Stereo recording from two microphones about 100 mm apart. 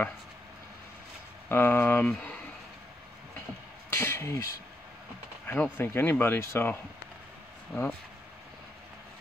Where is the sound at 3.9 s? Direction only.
25° left (ahead or behind).